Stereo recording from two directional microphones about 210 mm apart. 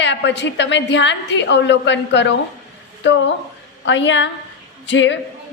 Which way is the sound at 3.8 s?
60° left (ahead or behind).